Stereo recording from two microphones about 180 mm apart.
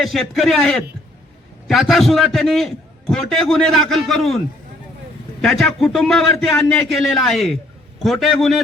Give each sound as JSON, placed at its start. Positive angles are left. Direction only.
{"t": 0.0, "sound": "a man's voice", "side_deg": 0}
{"t": 5.4, "sound": "a man's voice", "side_deg": 0}